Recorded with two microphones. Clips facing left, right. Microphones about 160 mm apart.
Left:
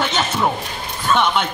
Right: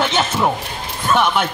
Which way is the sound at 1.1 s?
5° right (ahead or behind).